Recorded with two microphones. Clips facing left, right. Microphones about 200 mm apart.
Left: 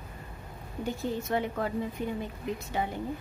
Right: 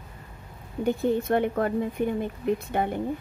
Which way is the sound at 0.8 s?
55° right (ahead or behind).